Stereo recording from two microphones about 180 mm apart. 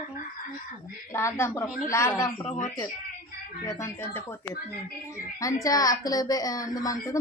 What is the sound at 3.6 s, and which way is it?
Speech, 15° left (ahead or behind).